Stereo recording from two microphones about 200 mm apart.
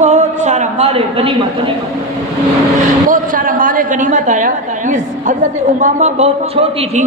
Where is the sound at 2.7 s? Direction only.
40° right (ahead or behind).